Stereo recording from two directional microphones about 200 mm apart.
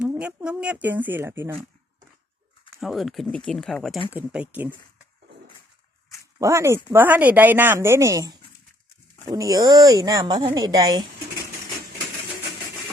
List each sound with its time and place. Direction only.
0.0 s speech: 5° right (ahead or behind)
2.8 s speech: centre (ahead or behind)
6.4 s speech: 15° right (ahead or behind)